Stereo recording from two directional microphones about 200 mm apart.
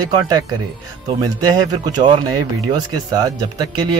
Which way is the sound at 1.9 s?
20° right (ahead or behind).